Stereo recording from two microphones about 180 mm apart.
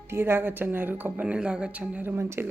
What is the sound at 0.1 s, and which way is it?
A woman's voice, 15° right (ahead or behind).